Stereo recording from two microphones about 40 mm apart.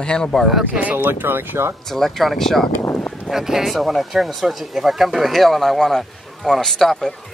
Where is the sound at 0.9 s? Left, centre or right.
Right.